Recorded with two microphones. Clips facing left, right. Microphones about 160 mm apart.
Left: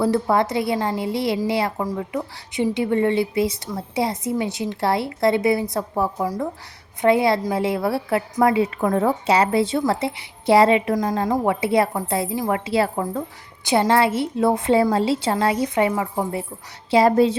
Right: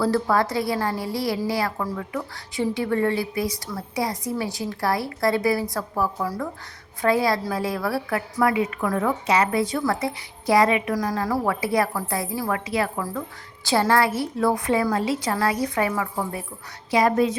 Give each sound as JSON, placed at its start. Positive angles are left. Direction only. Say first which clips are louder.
{"t": 0.0, "sound": "a woman's voice", "louder": "left 2 dB", "side_deg": 20}